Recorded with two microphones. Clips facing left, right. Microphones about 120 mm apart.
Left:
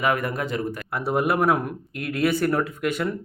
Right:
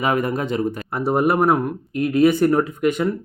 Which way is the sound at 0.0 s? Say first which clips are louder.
Right 3 dB; 25° right (ahead or behind).